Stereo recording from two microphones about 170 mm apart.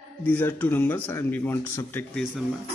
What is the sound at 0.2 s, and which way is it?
Speech, 10° left (ahead or behind).